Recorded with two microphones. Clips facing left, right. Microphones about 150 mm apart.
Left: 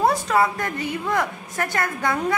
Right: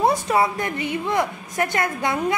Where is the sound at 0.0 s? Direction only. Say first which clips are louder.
Even; 20° right (ahead or behind).